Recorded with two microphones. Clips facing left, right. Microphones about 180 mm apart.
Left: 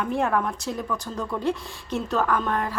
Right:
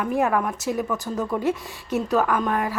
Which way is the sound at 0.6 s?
20° right (ahead or behind).